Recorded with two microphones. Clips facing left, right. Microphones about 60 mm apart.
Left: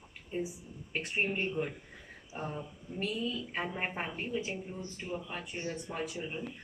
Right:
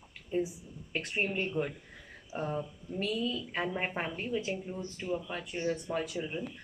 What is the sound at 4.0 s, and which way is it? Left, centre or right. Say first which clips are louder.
Speech: right 2 dB; centre.